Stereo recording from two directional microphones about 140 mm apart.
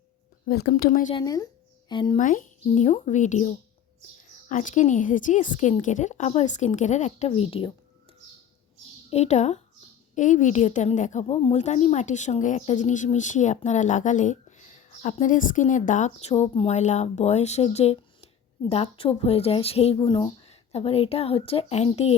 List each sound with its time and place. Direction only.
0.4 s a woman's voice: 90° left
1.1 s speech: 25° left (ahead or behind)
2.1 s a woman's voice: 65° left (ahead or behind); by 7.7 s 45° left (ahead or behind)
9.0 s a woman's voice: 50° left (ahead or behind)